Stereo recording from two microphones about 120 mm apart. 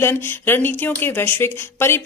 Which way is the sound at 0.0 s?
20° left (ahead or behind).